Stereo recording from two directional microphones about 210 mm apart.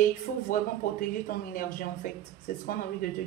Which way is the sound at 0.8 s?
40° left (ahead or behind).